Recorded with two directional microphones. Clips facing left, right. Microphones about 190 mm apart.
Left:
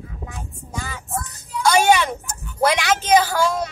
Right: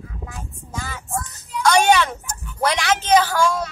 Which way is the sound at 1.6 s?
10° left (ahead or behind).